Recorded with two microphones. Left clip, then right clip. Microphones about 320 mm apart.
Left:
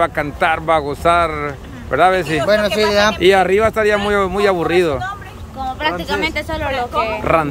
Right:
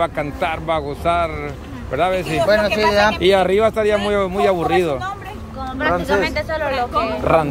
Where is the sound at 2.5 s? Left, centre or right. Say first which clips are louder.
Left 1 dB; left.